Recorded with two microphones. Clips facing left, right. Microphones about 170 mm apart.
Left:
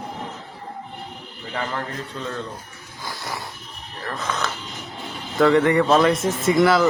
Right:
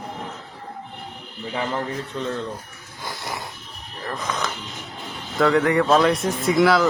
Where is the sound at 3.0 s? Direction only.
20° right (ahead or behind).